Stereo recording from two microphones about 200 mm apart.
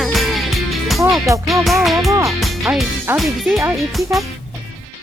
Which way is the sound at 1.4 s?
Centre (ahead or behind).